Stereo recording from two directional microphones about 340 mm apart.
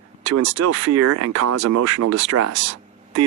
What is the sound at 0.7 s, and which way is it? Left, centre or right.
Speech, right.